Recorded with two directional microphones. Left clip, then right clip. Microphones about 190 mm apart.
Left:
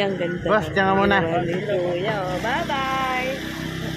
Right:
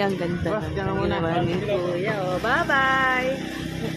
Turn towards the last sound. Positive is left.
turn(degrees=-25)  # may be behind; listen again after turning